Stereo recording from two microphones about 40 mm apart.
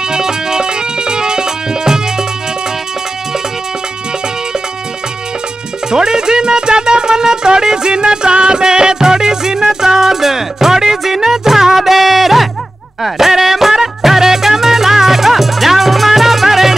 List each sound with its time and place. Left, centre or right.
0.1 s music: centre
5.9 s music: centre